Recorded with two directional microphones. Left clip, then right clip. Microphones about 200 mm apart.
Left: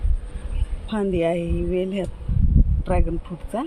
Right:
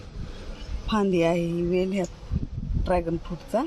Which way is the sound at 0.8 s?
15° right (ahead or behind).